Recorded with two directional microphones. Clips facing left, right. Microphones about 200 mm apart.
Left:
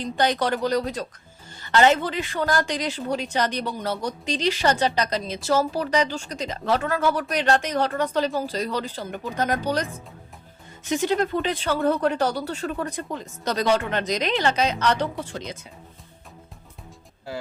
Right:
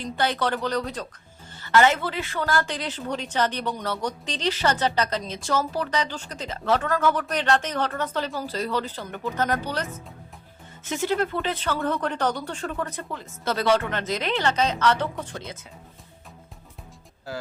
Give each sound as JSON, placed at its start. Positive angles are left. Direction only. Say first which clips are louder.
{"t": 0.0, "sound": "a woman's voice", "louder": "left 2 dB", "side_deg": 15}
{"t": 10.8, "sound": "a woman's voice", "louder": "left 2 dB", "side_deg": 15}